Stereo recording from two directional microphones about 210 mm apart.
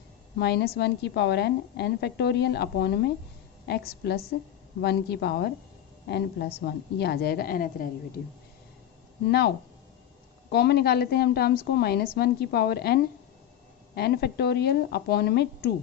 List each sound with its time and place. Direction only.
0.3 s a woman's voice: 50° left (ahead or behind)
9.2 s a woman's voice: 50° left (ahead or behind)
10.5 s a woman's voice: 50° left (ahead or behind)